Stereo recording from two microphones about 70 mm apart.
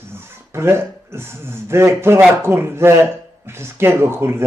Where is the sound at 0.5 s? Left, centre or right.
Right.